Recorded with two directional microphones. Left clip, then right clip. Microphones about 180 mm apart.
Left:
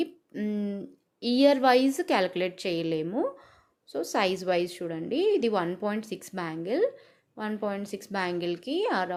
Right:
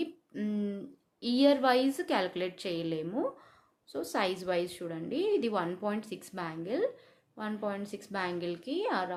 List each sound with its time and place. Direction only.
0.0 s a woman's voice: 25° left (ahead or behind)